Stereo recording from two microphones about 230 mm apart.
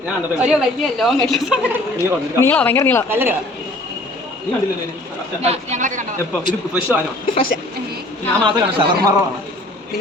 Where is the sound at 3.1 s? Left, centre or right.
Centre.